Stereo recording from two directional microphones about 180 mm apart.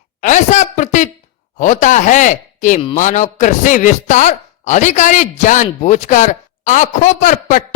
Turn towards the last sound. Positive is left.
turn(degrees=45)  # may be behind; listen again after turning